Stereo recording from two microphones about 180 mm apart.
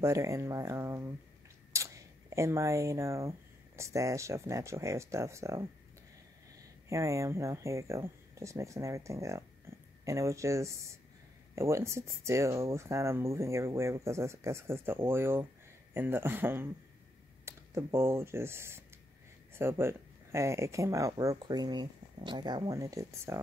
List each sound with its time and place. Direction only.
0.0 s speech: 15° right (ahead or behind)
6.9 s speech: 15° right (ahead or behind)